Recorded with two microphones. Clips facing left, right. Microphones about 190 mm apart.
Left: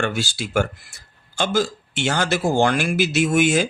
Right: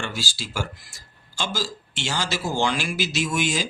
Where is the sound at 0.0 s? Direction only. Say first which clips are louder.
Left 8 dB; 60° left (ahead or behind).